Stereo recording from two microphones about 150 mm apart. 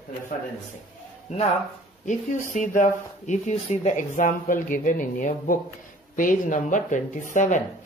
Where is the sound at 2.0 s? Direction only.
55° left (ahead or behind).